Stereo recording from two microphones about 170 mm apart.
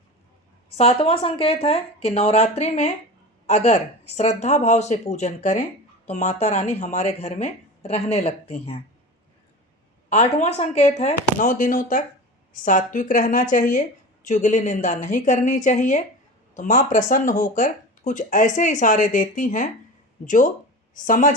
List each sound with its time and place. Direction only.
0.8 s a woman's voice: 35° left (ahead or behind)
10.1 s speech: 40° left (ahead or behind)